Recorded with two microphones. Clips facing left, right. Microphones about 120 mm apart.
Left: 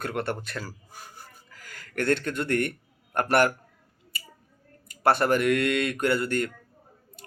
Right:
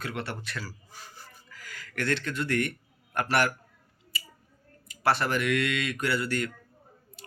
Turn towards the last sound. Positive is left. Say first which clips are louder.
# left 4 dB
turn(degrees=45)  # may be behind; listen again after turning